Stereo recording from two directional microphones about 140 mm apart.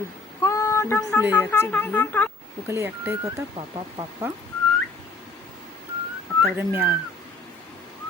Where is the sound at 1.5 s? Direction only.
15° left (ahead or behind).